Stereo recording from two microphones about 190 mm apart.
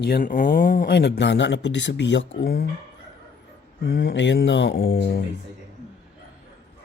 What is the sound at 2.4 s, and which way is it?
Speech, 55° left (ahead or behind).